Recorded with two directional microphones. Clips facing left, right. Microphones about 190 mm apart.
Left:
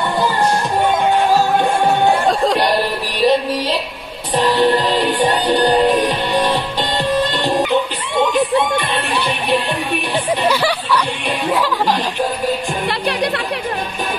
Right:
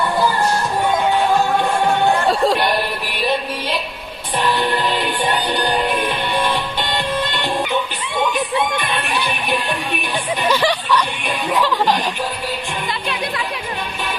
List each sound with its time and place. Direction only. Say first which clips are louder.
2.2 s music: left 1 dB; 5° right (ahead or behind)
2.6 s music: left 3 dB; 35° left (ahead or behind)
4.4 s music: left 5 dB; 35° left (ahead or behind)
8.7 s music: left 3 dB; 30° left (ahead or behind)
10.5 s a sound: even; 10° left (ahead or behind)